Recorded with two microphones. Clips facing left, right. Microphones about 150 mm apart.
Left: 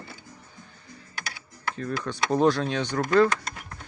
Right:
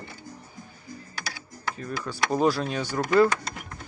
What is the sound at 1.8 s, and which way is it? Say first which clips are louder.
Speech: left 2 dB; 5° right (ahead or behind).